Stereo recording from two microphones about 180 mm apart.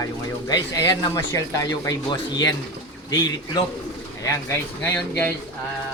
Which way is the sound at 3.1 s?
20° left (ahead or behind).